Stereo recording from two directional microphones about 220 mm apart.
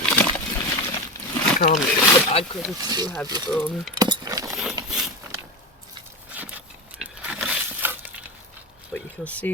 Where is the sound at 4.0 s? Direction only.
15° right (ahead or behind).